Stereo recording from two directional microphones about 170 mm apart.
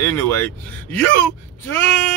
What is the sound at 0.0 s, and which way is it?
Speech, 10° left (ahead or behind).